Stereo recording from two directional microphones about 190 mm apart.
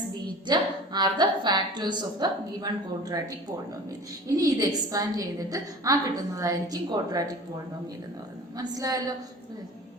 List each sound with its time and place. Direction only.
0.4 s a woman's voice: 20° right (ahead or behind)
8.5 s a woman's voice: 20° right (ahead or behind)